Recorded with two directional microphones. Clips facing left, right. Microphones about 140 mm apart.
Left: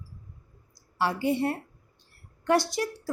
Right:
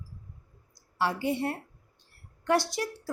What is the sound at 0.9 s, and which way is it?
A woman's voice, 35° left (ahead or behind).